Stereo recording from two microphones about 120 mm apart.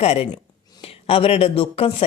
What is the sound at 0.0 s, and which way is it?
Speech, 60° left (ahead or behind).